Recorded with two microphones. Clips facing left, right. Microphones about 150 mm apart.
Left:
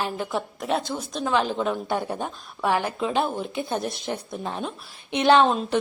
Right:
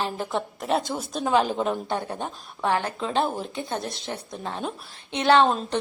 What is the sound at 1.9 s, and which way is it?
A woman's voice, 10° left (ahead or behind).